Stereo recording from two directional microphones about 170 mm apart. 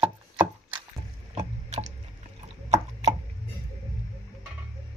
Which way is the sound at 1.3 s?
40° right (ahead or behind).